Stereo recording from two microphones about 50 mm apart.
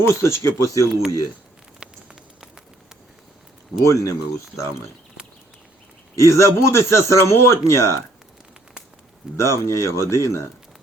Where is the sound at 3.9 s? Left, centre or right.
Left.